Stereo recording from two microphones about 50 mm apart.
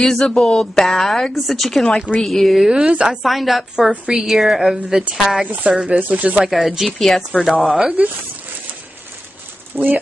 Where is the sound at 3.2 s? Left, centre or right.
Centre.